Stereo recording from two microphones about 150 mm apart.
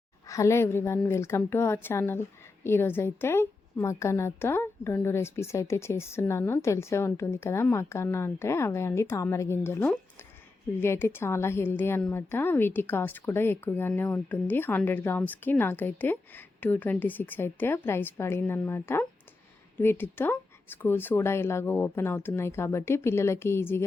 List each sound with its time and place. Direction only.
0.3 s a woman's voice: 20° left (ahead or behind)